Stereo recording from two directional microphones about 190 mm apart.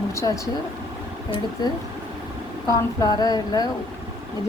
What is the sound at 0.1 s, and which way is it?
Speech, 15° left (ahead or behind).